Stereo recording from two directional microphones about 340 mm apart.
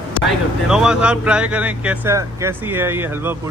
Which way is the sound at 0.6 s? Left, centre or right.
Centre.